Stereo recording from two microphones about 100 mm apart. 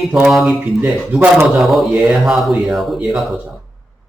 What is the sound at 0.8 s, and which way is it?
Speech, 20° right (ahead or behind).